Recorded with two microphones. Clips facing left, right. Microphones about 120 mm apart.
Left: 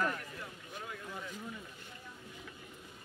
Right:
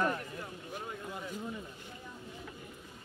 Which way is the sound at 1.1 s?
15° right (ahead or behind).